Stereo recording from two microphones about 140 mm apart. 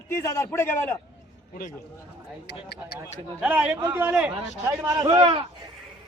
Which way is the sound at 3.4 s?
10° right (ahead or behind).